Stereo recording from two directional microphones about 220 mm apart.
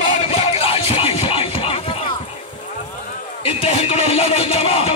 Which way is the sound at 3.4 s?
25° left (ahead or behind).